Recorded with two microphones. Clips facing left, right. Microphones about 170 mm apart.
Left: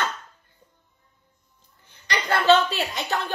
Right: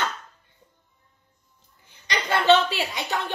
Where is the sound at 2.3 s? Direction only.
20° right (ahead or behind).